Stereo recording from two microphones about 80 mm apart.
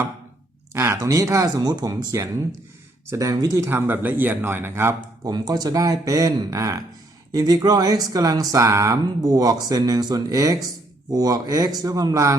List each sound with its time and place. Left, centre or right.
0.7 s speech: right
3.7 s speech: right
5.3 s speech: right
9.2 s speech: right